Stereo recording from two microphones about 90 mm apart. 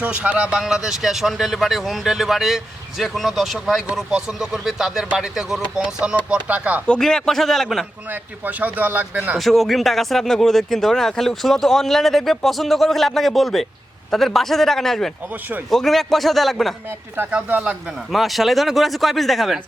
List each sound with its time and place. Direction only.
0.0 s speech: 15° right (ahead or behind)
6.8 s speech: 10° left (ahead or behind)
8.1 s speech: 20° right (ahead or behind)
9.4 s speech: centre (ahead or behind)
17.2 s speech: 15° right (ahead or behind)
18.1 s speech: centre (ahead or behind)